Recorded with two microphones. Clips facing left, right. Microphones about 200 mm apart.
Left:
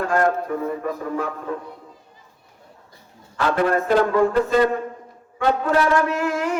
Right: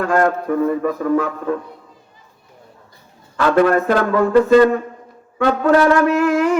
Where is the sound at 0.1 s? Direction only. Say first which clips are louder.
Right 4 dB; 75° right (ahead or behind).